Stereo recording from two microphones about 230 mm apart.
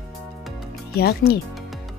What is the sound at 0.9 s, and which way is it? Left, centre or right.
Speech, left.